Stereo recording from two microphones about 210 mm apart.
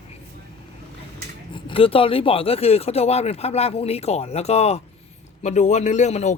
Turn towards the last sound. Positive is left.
turn(degrees=35)  # may be behind; listen again after turning